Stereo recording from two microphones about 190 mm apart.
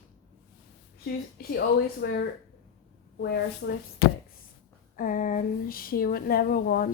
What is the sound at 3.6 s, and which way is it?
Speech, 65° left (ahead or behind).